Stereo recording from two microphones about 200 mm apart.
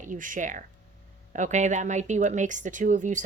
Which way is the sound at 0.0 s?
40° right (ahead or behind).